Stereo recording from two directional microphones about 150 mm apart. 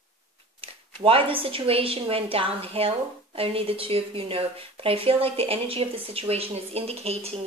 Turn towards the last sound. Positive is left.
turn(degrees=-40)  # may be behind; listen again after turning